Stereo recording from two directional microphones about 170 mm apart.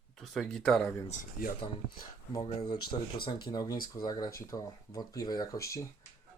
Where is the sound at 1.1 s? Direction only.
55° left (ahead or behind).